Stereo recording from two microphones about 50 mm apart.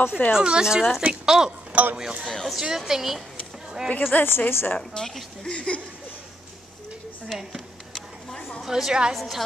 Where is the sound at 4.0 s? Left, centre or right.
Left.